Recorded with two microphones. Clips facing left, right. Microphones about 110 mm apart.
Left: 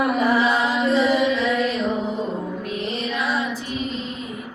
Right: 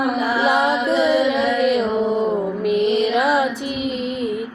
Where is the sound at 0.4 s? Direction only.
70° right (ahead or behind).